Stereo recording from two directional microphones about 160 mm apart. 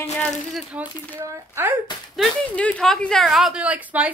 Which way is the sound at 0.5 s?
5° right (ahead or behind).